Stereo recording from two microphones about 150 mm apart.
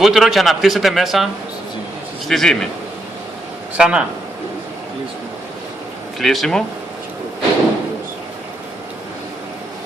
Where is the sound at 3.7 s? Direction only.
5° right (ahead or behind).